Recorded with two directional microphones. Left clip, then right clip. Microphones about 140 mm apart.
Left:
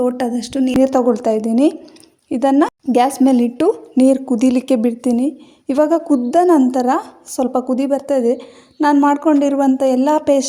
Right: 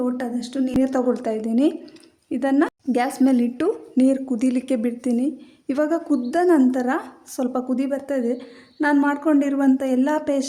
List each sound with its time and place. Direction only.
0.0 s a woman's voice: 40° left (ahead or behind)